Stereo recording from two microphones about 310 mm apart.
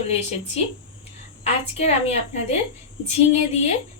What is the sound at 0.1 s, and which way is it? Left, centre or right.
Speech, left.